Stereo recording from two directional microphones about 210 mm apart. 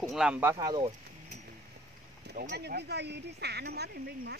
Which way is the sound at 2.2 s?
45° right (ahead or behind).